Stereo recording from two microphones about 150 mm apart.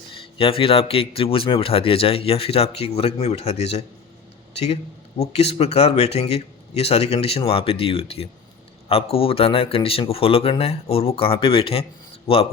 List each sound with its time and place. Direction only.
0.1 s speech: 40° left (ahead or behind)
5.2 s speech: 45° left (ahead or behind)